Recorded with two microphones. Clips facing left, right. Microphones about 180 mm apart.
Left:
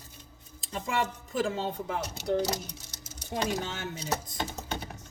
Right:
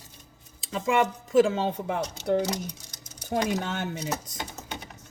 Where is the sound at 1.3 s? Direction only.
90° right.